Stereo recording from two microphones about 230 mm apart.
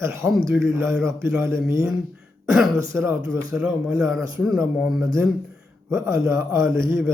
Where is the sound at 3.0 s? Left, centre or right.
Centre.